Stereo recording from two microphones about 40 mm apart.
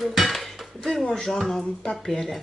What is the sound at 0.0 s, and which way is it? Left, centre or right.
Dishes, centre.